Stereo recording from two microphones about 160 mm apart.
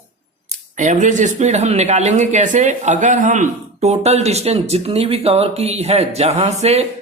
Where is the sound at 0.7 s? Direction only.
50° right (ahead or behind).